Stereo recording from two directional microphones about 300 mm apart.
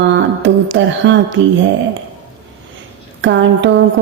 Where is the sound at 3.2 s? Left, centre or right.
Right.